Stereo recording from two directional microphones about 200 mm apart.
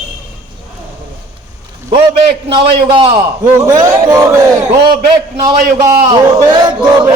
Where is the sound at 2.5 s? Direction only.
25° right (ahead or behind).